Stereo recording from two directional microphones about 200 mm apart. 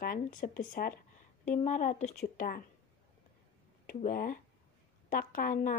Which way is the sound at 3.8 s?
45° left (ahead or behind).